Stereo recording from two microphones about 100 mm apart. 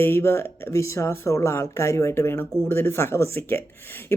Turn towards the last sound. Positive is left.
turn(degrees=25)  # may be behind; listen again after turning